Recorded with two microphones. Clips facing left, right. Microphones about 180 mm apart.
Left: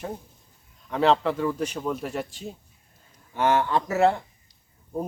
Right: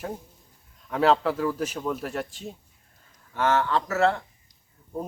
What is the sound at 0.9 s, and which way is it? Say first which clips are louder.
Speech: even; centre (ahead or behind).